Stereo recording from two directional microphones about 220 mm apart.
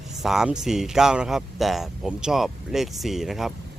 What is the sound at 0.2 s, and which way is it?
Speech, centre (ahead or behind).